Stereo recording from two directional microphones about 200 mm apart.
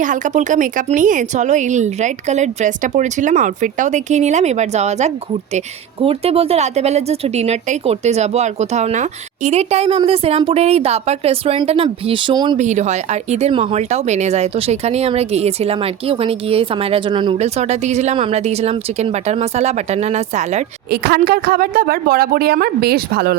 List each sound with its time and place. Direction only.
0.0 s speech: 40° right (ahead or behind); by 12.5 s 20° right (ahead or behind)
12.5 s speech: 35° right (ahead or behind)
20.9 s a woman's voice: 50° right (ahead or behind)